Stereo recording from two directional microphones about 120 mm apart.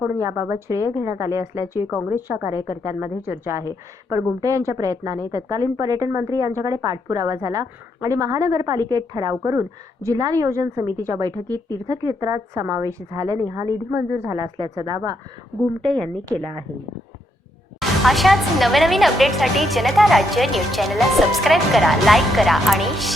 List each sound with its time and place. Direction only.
0.2 s a woman's voice: 25° right (ahead or behind)
14.3 s a woman's voice: 35° right (ahead or behind)
17.7 s speech: centre (ahead or behind)